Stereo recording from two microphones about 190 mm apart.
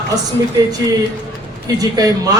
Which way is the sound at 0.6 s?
20° right (ahead or behind).